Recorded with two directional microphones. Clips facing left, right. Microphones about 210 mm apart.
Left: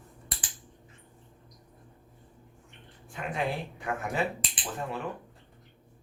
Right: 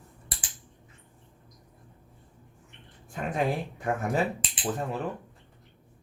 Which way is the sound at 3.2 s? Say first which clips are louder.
Right 4 dB; 45° right (ahead or behind).